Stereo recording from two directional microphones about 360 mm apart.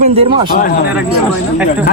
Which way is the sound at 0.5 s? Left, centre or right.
Left.